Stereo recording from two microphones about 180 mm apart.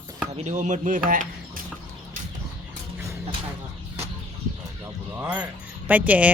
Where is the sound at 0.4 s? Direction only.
40° right (ahead or behind).